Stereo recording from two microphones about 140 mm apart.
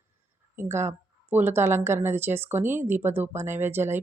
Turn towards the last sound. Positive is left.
turn(degrees=-15)  # may be behind; listen again after turning